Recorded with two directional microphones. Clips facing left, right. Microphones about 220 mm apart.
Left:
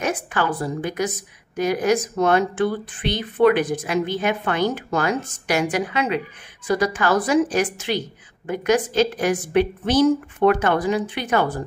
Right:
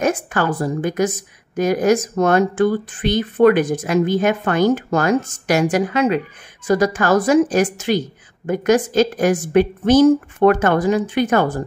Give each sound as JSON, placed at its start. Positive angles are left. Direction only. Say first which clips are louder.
{"t": 0.0, "sound": "speech", "louder": "right 4 dB", "side_deg": -45}